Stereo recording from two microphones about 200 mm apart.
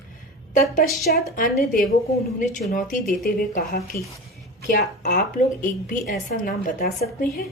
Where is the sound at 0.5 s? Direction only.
40° left (ahead or behind).